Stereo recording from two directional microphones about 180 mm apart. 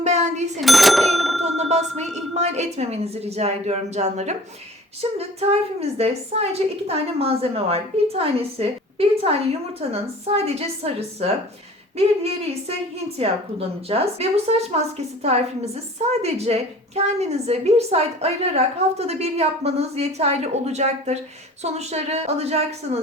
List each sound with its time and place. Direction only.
0.0 s cash register: 40° right (ahead or behind)
0.6 s a sound: centre (ahead or behind)
1.4 s ding: 40° right (ahead or behind)
2.1 s a woman's voice: 40° right (ahead or behind)